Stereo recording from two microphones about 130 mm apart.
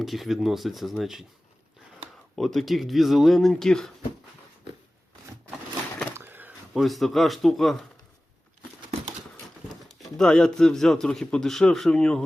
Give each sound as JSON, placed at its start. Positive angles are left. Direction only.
{"t": 0.0, "sound": "speech", "side_deg": 0}
{"t": 2.3, "sound": "speech", "side_deg": 0}
{"t": 6.1, "sound": "a sound", "side_deg": -15}
{"t": 6.7, "sound": "speech", "side_deg": 0}
{"t": 9.9, "sound": "speech", "side_deg": 5}